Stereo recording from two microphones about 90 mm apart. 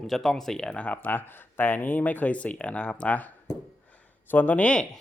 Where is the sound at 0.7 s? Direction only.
15° left (ahead or behind).